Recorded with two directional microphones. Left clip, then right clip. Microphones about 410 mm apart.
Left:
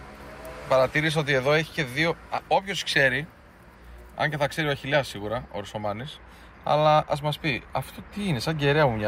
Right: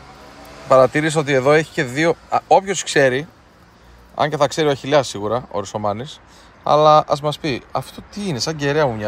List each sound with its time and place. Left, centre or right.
0.7 s speech: centre